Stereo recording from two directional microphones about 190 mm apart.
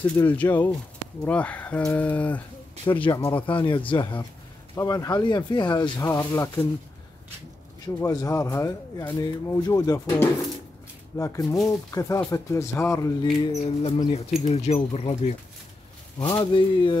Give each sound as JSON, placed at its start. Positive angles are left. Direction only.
{"t": 0.0, "sound": "speech", "side_deg": 10}
{"t": 2.8, "sound": "speech", "side_deg": 25}
{"t": 7.8, "sound": "speech", "side_deg": 20}
{"t": 13.5, "sound": "speech", "side_deg": 35}